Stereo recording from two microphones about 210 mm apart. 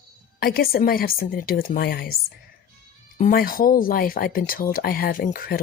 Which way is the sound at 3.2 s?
45° left (ahead or behind).